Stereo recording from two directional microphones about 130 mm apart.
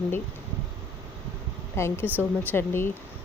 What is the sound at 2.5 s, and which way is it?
Speech, 20° left (ahead or behind).